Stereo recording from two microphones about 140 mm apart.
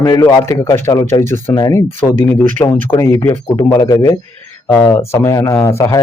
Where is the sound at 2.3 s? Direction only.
15° left (ahead or behind).